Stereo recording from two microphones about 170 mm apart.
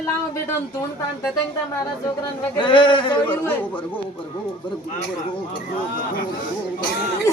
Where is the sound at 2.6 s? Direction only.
30° left (ahead or behind).